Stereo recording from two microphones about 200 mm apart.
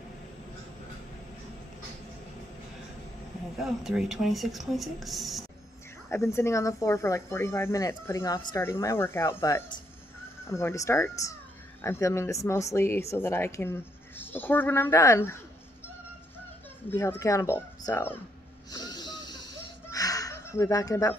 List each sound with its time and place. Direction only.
3.5 s speech: centre (ahead or behind)
6.0 s speech: 15° left (ahead or behind)
16.9 s speech: 10° left (ahead or behind)
18.7 s a sound: 20° left (ahead or behind)